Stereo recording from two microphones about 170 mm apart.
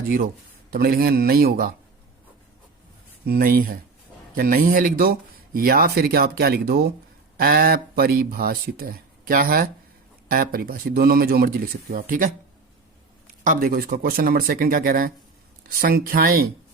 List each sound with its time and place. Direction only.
0.7 s speech: 60° right (ahead or behind)
3.2 s speech: 60° right (ahead or behind)
13.4 s speech: 55° right (ahead or behind)